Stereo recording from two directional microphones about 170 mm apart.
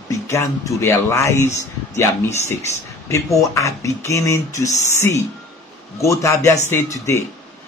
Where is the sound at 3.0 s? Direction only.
20° left (ahead or behind).